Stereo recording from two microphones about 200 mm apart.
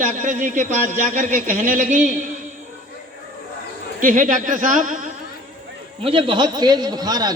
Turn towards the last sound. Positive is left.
turn(degrees=-20)  # may be behind; listen again after turning